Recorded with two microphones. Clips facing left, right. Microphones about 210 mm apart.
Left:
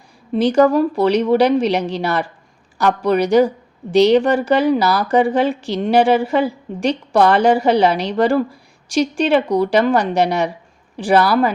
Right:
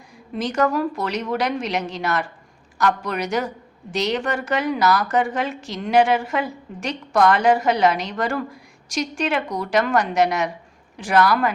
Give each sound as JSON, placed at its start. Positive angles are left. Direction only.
{"t": 0.3, "sound": "a woman's voice", "side_deg": 30}